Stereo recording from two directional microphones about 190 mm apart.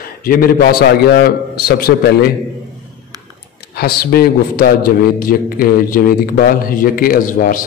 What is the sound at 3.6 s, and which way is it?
A man's voice, 55° left (ahead or behind).